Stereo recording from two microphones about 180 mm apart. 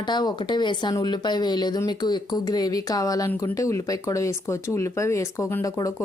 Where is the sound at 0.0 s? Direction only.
25° left (ahead or behind).